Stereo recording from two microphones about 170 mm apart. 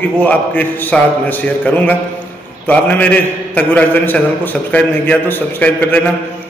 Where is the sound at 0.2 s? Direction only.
10° left (ahead or behind).